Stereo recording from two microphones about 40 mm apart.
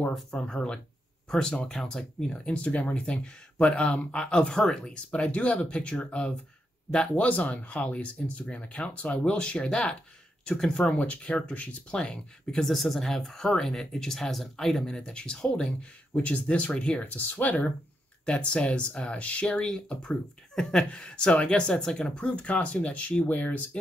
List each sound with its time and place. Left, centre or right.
0.4 s speech: left
1.6 s speech: centre
2.3 s speech: left
4.5 s speech: centre
4.8 s speech: left; by 10.9 s centre
10.9 s speech: left
12.6 s speech: centre; by 15.9 s left
16.1 s speech: left
17.0 s speech: left
18.2 s speech: left